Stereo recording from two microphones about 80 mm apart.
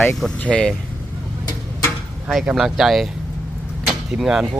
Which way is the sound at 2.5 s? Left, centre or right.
Centre.